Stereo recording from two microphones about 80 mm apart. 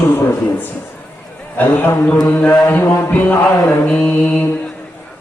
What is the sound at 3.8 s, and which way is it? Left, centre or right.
Mantra, centre.